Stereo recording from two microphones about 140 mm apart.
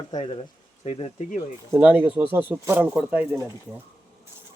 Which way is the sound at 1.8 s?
10° right (ahead or behind).